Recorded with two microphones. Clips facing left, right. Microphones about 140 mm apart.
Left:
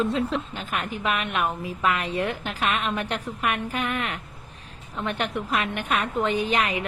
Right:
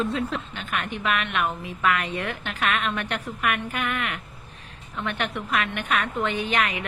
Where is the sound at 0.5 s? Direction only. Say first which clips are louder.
Even; 35° left (ahead or behind).